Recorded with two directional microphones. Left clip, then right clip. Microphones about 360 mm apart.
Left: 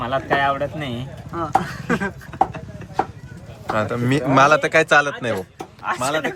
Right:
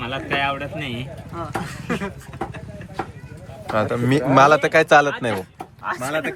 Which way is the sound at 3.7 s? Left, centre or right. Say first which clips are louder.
Right 1 dB; centre.